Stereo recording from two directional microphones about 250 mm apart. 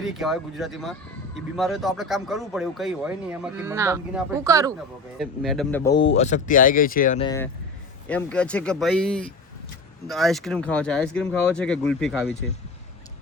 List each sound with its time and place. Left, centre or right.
0.0 s speech: centre
5.2 s speech: centre
5.8 s speech: centre
6.1 s speech: left
7.2 s speech: centre